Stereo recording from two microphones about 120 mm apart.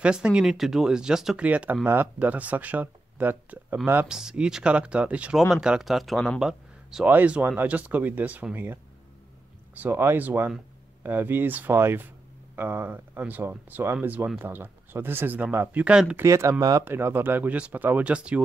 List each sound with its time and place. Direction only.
0.0 s speech: 10° right (ahead or behind)
4.2 s speech: 5° right (ahead or behind)
9.8 s speech: 20° right (ahead or behind)
16.2 s speech: 25° right (ahead or behind)